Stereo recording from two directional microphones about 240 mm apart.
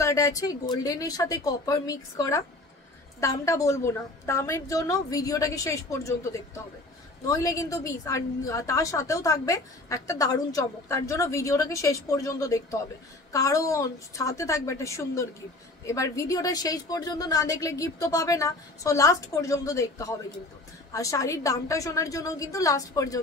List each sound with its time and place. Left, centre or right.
0.0 s a woman's voice: centre